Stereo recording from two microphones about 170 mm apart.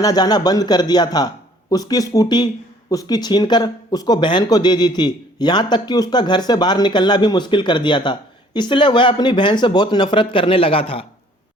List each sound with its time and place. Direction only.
0.0 s speech: 25° left (ahead or behind)